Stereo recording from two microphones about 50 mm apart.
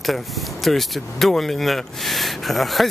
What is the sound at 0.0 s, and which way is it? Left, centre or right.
Speech, centre.